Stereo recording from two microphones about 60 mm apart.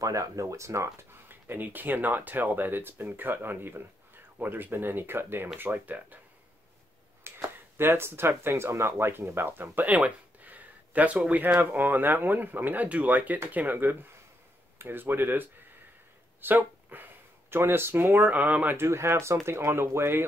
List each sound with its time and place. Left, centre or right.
0.0 s speech: right
1.3 s speech: right
7.2 s speech: right
18.8 s speech: right